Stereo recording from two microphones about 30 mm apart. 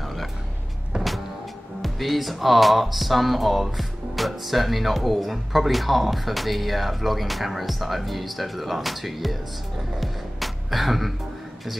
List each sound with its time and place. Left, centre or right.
0.0 s music: centre
0.9 s power windows: right
1.8 s speech: centre